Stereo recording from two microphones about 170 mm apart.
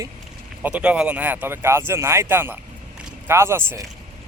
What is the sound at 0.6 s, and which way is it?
Speech, 5° right (ahead or behind).